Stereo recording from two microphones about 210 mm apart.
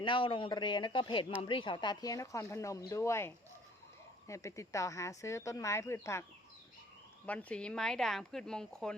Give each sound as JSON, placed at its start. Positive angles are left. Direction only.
{"t": 0.0, "sound": "speech", "side_deg": 25}
{"t": 7.3, "sound": "speech", "side_deg": 5}